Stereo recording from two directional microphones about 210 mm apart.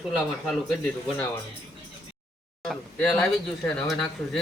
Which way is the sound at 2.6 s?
5° left (ahead or behind).